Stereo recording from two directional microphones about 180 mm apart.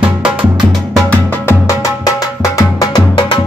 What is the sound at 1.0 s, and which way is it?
Music, 15° left (ahead or behind).